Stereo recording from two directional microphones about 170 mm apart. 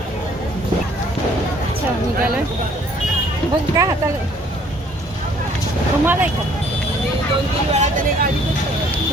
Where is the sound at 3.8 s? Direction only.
20° right (ahead or behind).